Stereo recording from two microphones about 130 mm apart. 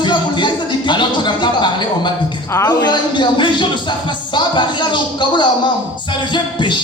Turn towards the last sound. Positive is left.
turn(degrees=35)  # may be behind; listen again after turning